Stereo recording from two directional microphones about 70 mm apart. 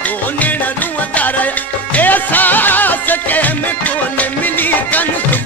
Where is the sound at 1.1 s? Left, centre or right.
Left.